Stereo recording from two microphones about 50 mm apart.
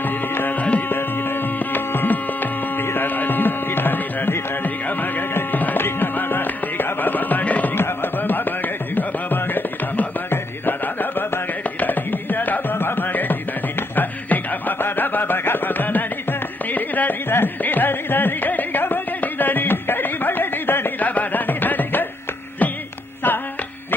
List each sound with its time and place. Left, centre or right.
0.0 s music: left
0.8 s music: left
7.7 s music: left
21.0 s music: left